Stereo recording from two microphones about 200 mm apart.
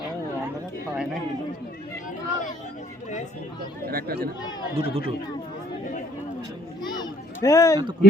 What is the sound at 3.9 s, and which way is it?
Speech, 50° right (ahead or behind).